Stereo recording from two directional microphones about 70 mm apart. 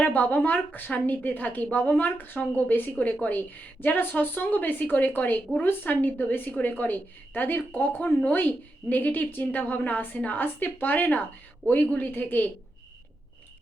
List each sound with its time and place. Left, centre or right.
0.0 s a woman's voice: left